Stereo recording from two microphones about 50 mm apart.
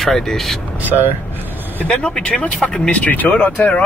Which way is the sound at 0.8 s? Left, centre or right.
Right.